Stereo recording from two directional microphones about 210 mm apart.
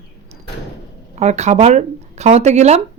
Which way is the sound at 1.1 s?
30° right (ahead or behind).